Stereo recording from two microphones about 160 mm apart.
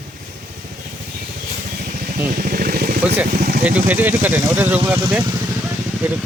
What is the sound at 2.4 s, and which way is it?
Vehicle, 65° right (ahead or behind).